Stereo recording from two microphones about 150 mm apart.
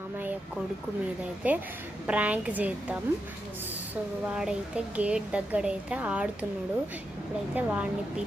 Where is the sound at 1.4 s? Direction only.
10° right (ahead or behind).